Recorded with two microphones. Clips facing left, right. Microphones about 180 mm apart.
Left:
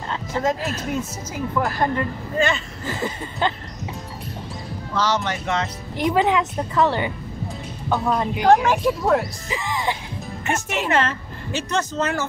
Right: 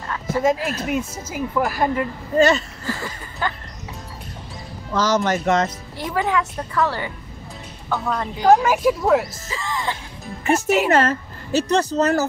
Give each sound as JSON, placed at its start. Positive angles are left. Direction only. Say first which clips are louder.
{"t": 0.3, "sound": "speech", "louder": "right 4 dB", "side_deg": -10}
{"t": 2.3, "sound": "speech", "louder": "right 6 dB", "side_deg": -40}
{"t": 2.8, "sound": "speech", "louder": "left 2 dB", "side_deg": 20}
{"t": 4.9, "sound": "a man's voice", "louder": "right 4 dB", "side_deg": -45}
{"t": 5.9, "sound": "a woman's voice", "louder": "left 3 dB", "side_deg": 20}
{"t": 8.1, "sound": "a woman's voice", "louder": "left 4 dB", "side_deg": 20}
{"t": 8.6, "sound": "a woman's voice", "louder": "right 2 dB", "side_deg": -5}
{"t": 9.5, "sound": "music", "louder": "left 2 dB", "side_deg": 15}
{"t": 10.9, "sound": "speech", "louder": "right 4 dB", "side_deg": -40}